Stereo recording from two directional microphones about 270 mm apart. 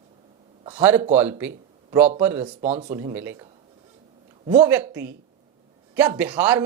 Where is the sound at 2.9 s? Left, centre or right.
Centre.